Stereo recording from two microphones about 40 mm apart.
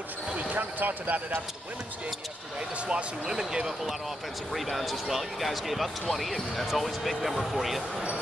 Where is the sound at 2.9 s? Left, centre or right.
Centre.